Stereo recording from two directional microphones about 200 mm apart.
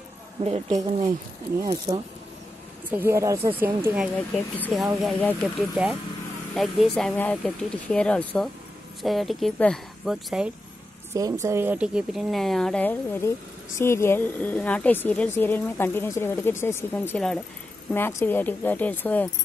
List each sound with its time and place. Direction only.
0.4 s a woman's voice: 35° right (ahead or behind)
1.9 s speech: 30° right (ahead or behind)
2.9 s speech: 10° right (ahead or behind)
4.6 s a woman's voice: 5° left (ahead or behind)
11.1 s a woman's voice: 15° right (ahead or behind); by 19.2 s 10° left (ahead or behind)